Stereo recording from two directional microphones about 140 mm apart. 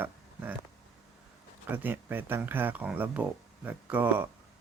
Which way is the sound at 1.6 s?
15° right (ahead or behind).